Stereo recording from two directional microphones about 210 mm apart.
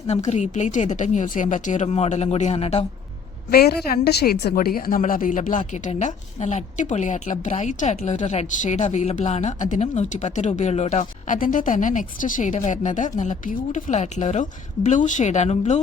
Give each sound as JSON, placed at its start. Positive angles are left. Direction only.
{"t": 0.3, "sound": "a woman's voice", "side_deg": 35}
{"t": 3.5, "sound": "a woman's voice", "side_deg": 45}